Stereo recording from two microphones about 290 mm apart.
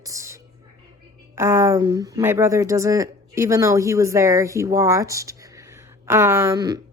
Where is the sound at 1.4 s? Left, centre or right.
Centre.